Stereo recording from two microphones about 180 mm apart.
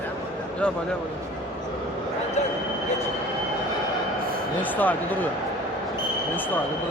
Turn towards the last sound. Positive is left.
turn(degrees=10)  # may be behind; listen again after turning